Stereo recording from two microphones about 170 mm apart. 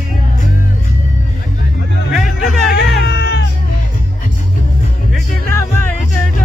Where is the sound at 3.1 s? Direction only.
85° left.